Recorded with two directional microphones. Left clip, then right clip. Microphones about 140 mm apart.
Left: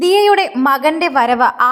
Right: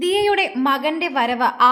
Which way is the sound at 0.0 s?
25° left (ahead or behind).